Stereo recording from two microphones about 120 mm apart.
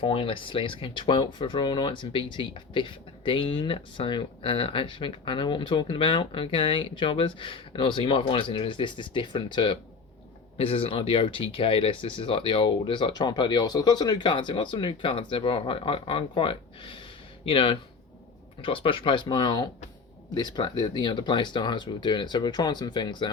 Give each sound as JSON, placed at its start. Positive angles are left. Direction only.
{"t": 0.0, "sound": "speech", "side_deg": 50}
{"t": 10.6, "sound": "speech", "side_deg": 50}